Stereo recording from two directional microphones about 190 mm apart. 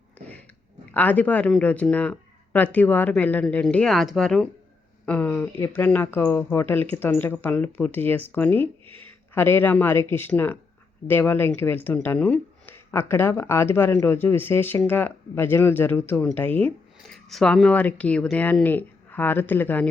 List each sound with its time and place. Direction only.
0.9 s speech: 10° left (ahead or behind)